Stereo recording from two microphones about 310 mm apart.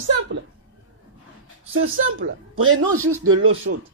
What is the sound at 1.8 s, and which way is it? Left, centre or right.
A man's voice, right.